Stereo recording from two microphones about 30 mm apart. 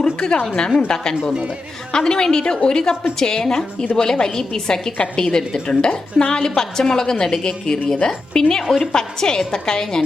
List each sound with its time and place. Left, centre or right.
0.0 s a woman's voice: left
1.9 s a woman's voice: left